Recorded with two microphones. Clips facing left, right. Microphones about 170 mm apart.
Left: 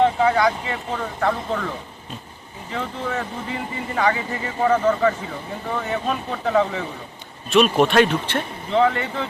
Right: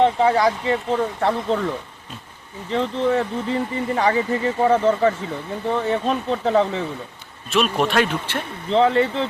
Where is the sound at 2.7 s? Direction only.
30° right (ahead or behind).